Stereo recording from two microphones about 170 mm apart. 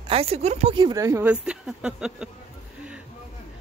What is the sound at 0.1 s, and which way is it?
Speech, 35° right (ahead or behind).